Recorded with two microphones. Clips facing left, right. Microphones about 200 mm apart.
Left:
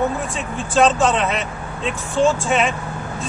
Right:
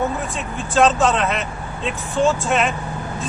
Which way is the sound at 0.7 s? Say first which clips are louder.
Even; centre (ahead or behind).